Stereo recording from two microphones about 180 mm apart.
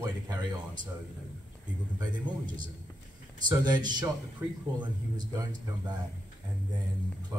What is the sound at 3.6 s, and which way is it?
Speech, 25° right (ahead or behind).